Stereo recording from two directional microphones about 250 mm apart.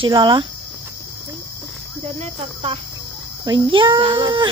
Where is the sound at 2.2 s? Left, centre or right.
Right.